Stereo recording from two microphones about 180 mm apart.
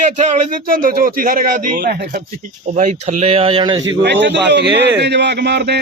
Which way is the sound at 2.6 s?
40° right (ahead or behind).